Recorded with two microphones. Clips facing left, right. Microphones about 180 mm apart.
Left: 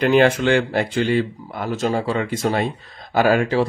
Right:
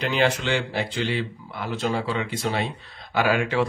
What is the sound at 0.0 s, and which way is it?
Speech, 50° left (ahead or behind).